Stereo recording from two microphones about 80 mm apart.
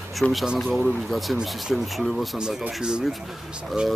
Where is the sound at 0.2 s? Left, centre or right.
Centre.